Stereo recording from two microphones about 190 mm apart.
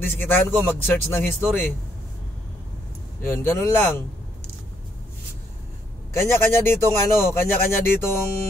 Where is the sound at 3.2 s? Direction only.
10° left (ahead or behind).